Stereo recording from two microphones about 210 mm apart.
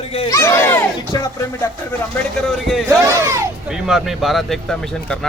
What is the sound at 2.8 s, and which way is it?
Speech, 15° right (ahead or behind).